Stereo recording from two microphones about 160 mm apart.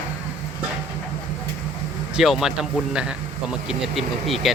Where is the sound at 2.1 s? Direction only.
5° right (ahead or behind).